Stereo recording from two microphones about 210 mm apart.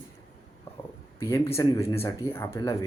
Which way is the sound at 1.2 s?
10° left (ahead or behind).